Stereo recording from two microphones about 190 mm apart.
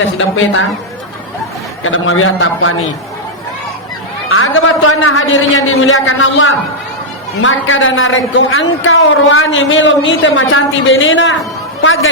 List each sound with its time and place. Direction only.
0.0 s a man's voice: 90° left
1.8 s a man's voice: 90° left
4.3 s a man's voice: 90° left